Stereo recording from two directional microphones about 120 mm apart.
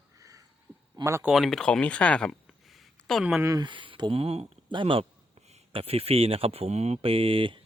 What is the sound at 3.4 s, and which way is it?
Speech, 35° right (ahead or behind).